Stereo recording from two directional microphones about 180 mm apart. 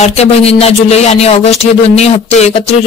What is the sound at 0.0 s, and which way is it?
Speech, 35° left (ahead or behind).